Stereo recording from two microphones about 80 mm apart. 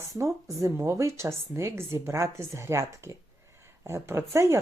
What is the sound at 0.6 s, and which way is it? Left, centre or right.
Speech, right.